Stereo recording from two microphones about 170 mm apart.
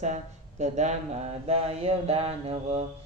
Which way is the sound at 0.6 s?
45° right (ahead or behind).